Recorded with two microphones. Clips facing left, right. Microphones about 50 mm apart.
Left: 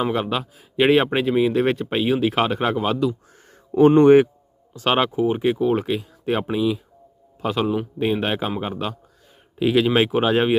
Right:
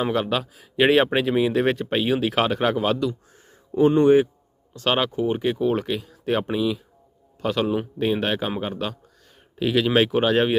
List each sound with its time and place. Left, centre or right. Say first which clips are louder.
0.0 s speech: even; centre
3.8 s speech: left 4 dB; left
4.7 s speech: left 2 dB; left